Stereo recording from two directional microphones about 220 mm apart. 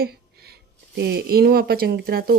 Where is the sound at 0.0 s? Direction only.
45° right (ahead or behind).